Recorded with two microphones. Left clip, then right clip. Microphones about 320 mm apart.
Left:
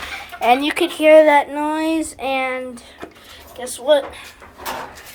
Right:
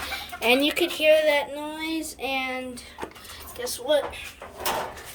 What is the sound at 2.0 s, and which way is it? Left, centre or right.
A woman's voice, centre.